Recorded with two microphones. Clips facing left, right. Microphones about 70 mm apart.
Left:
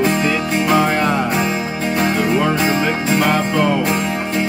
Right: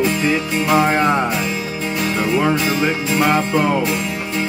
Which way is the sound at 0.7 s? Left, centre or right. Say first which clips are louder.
Right 3 dB; right.